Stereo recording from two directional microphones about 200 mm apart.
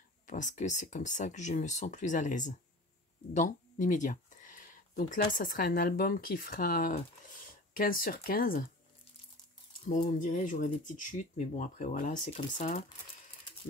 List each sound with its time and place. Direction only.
0.3 s speech: 40° left (ahead or behind)
9.8 s speech: 40° left (ahead or behind)